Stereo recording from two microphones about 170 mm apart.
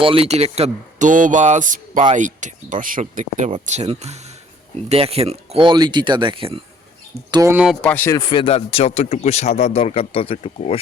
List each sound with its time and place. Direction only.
0.0 s speech: 35° right (ahead or behind)
7.5 s speech: 5° right (ahead or behind)
7.8 s speech: 10° left (ahead or behind)
8.3 s speech: 30° left (ahead or behind)